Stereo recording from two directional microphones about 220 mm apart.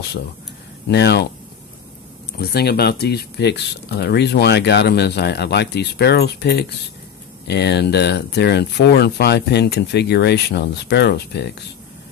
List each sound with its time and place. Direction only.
0.8 s speech: 50° left (ahead or behind)
2.3 s speech: 45° left (ahead or behind)